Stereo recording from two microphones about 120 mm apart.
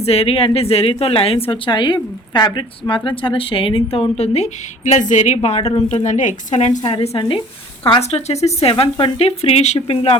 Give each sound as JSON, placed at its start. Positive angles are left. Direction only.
{"t": 0.0, "sound": "a woman's voice", "side_deg": 60}
{"t": 7.1, "sound": "speech", "side_deg": 45}
{"t": 8.1, "sound": "a woman's voice", "side_deg": 65}
{"t": 8.8, "sound": "a woman's voice", "side_deg": 50}